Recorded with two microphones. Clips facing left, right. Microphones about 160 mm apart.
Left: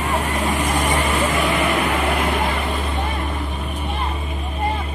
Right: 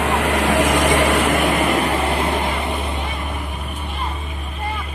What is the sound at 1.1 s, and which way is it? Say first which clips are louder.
Vehicle: right 3 dB; 70° right (ahead or behind).